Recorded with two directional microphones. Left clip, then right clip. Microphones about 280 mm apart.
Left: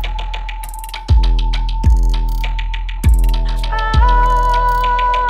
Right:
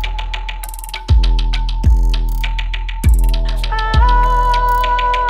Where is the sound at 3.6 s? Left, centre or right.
Centre.